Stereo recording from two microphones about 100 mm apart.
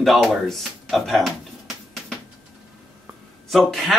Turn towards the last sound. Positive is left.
turn(degrees=0)  # may be behind; listen again after turning